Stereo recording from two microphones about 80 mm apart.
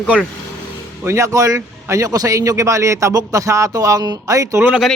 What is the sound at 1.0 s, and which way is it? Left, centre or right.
A man's voice, right.